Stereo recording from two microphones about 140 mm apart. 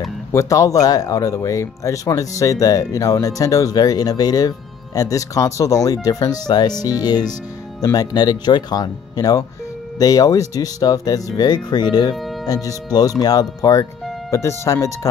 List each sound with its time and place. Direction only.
0.3 s speech: 20° left (ahead or behind)